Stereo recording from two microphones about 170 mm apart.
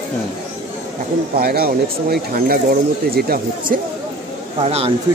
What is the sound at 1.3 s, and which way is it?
Speech, 65° right (ahead or behind).